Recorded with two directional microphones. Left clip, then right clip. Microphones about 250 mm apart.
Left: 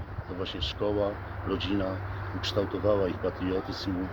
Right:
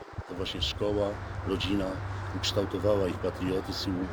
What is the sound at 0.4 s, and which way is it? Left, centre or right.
Speech, centre.